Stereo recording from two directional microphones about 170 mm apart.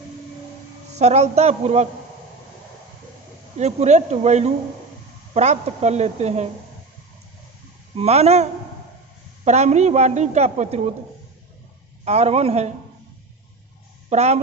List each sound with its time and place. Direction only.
0.9 s a woman's voice: 40° right (ahead or behind)
3.6 s a woman's voice: 40° right (ahead or behind)
7.9 s a woman's voice: 40° right (ahead or behind)
12.0 s a woman's voice: 40° right (ahead or behind)
14.1 s a woman's voice: 40° right (ahead or behind)